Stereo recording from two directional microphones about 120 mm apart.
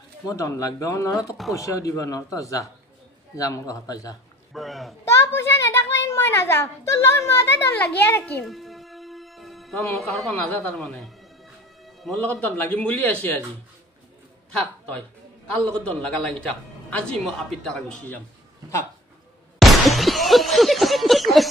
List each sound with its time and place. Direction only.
0.4 s speech: 25° left (ahead or behind)
4.6 s a woman's voice: centre (ahead or behind)
5.0 s a child's voice: 20° left (ahead or behind)
8.5 s music: centre (ahead or behind)
9.9 s a woman's voice: 5° left (ahead or behind)
11.8 s music: centre (ahead or behind)
12.2 s a man's voice: 10° left (ahead or behind)
15.5 s a man's voice: 10° left (ahead or behind)
19.6 s a sound: centre (ahead or behind)